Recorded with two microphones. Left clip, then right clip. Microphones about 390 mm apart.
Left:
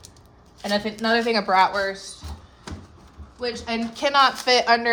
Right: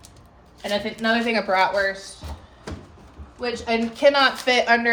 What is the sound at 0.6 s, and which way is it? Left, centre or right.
A woman's voice, centre.